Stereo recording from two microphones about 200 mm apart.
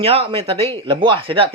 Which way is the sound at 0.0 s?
30° right (ahead or behind).